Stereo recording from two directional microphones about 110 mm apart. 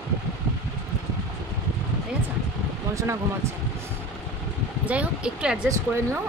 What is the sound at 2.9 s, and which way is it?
Speech, 25° right (ahead or behind).